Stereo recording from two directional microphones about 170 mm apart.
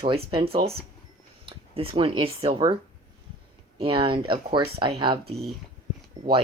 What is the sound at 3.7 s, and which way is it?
Speech, 30° right (ahead or behind).